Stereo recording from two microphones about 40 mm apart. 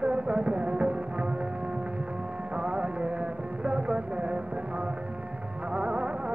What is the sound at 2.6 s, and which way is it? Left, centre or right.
Music, right.